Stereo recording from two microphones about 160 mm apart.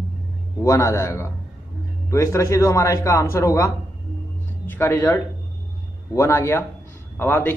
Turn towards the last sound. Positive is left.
turn(degrees=15)  # may be behind; listen again after turning